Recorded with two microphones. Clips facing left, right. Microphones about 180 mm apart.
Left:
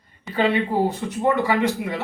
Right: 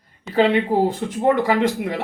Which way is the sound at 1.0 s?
55° right (ahead or behind).